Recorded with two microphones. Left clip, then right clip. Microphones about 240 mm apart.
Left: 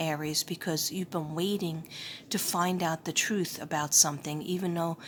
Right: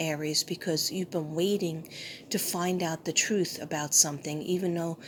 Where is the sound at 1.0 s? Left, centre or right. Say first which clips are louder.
Right 3 dB; left.